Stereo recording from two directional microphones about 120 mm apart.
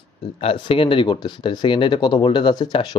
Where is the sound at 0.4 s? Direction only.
50° left (ahead or behind).